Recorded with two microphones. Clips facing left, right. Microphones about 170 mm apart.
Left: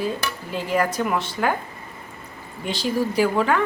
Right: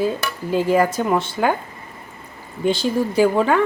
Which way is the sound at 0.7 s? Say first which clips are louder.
Right 2 dB; 25° right (ahead or behind).